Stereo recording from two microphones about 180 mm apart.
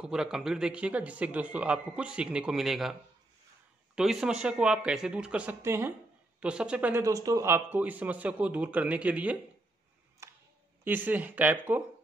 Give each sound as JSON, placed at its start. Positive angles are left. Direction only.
{"t": 0.0, "sound": "speech", "side_deg": -5}
{"t": 10.2, "sound": "a sound", "side_deg": -15}
{"t": 10.8, "sound": "speech", "side_deg": -10}